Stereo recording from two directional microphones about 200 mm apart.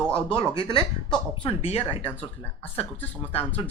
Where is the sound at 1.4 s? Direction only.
30° left (ahead or behind).